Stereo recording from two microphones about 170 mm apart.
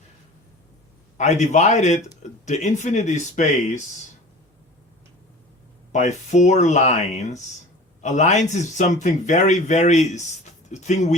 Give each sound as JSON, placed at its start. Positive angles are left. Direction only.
{"t": 1.2, "sound": "speech", "side_deg": 40}
{"t": 5.9, "sound": "speech", "side_deg": 45}